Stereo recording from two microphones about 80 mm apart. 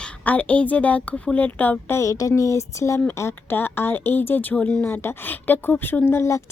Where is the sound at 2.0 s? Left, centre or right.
Left.